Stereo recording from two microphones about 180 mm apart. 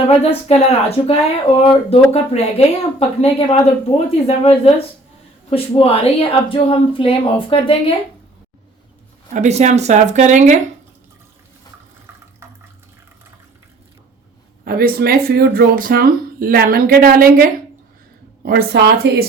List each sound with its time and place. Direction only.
0.1 s speech: 35° left (ahead or behind)
9.3 s speech: 40° right (ahead or behind)
12.4 s water: 15° right (ahead or behind)
14.6 s speech: 55° right (ahead or behind)